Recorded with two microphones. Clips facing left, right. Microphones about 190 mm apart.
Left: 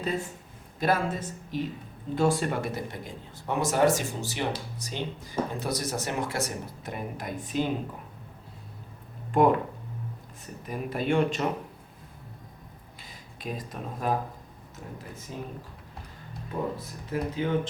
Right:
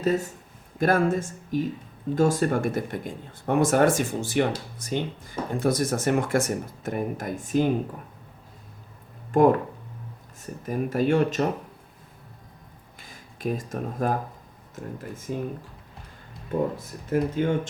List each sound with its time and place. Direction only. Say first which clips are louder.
0.0 s a man's voice: right 7 dB; 45° right (ahead or behind)
9.3 s speech: right 3 dB; 45° right (ahead or behind)
13.0 s speech: right 9 dB; 50° right (ahead or behind)
16.7 s speech: right 6 dB; 45° right (ahead or behind)